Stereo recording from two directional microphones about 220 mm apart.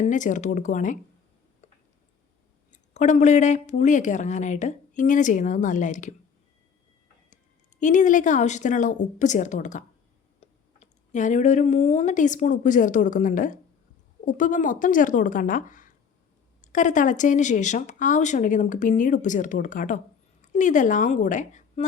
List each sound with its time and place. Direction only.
0.0 s speech: 35° left (ahead or behind)
2.7 s speech: 35° left (ahead or behind)
7.8 s a woman's voice: 35° left (ahead or behind)